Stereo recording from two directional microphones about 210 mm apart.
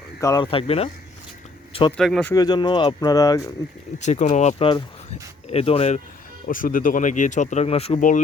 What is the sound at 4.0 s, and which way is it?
Speech, 35° left (ahead or behind).